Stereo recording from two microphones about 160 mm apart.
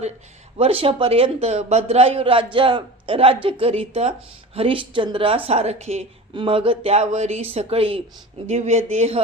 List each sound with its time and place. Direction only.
0.5 s speech: 35° right (ahead or behind)